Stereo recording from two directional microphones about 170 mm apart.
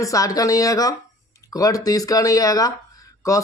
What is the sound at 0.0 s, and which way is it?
Speech, 20° left (ahead or behind).